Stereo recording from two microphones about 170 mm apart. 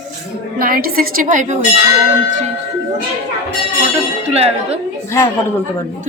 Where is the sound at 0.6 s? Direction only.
55° right (ahead or behind).